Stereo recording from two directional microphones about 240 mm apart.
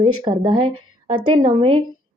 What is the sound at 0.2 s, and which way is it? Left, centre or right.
A woman's voice, right.